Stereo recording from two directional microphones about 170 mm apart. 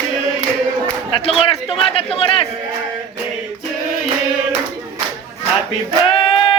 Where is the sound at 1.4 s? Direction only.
35° left (ahead or behind).